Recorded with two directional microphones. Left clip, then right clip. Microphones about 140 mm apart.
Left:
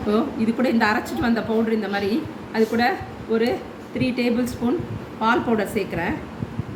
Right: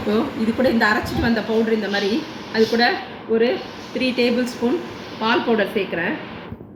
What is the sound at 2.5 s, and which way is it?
Speech, 25° left (ahead or behind).